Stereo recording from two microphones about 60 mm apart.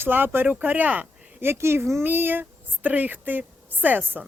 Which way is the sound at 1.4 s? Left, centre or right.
Right.